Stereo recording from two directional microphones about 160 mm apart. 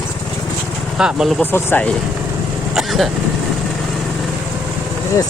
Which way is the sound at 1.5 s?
10° left (ahead or behind).